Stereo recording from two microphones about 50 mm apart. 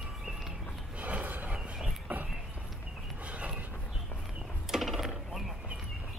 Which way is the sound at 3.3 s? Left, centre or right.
Right.